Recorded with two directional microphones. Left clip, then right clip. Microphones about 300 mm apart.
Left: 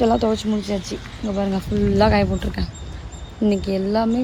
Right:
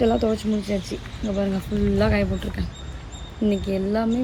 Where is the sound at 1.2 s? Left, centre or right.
Centre.